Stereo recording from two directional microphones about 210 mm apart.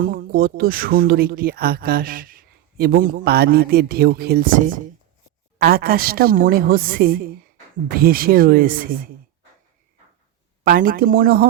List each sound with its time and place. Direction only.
0.0 s speech: 45° right (ahead or behind)
10.6 s speech: 45° right (ahead or behind)